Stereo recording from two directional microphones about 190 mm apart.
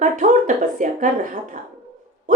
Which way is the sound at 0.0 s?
45° right (ahead or behind).